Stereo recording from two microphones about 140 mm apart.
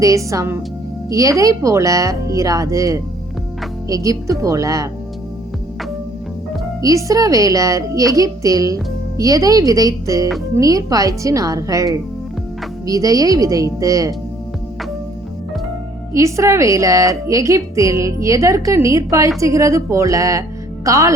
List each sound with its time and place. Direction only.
0.0 s a woman's voice: 20° right (ahead or behind)
6.8 s a woman's voice: 25° right (ahead or behind)
16.1 s a woman's voice: 20° right (ahead or behind)